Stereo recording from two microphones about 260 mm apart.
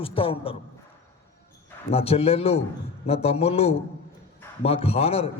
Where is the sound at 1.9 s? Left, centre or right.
Left.